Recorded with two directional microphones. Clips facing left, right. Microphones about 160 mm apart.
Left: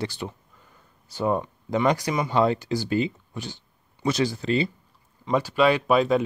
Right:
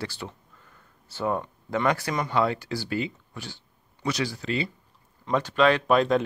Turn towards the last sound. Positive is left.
turn(degrees=5)  # may be behind; listen again after turning